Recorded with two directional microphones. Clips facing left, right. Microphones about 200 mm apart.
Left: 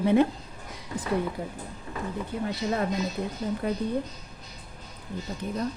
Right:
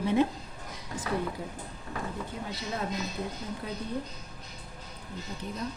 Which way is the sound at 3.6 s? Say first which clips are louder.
Left 10 dB; 55° left (ahead or behind).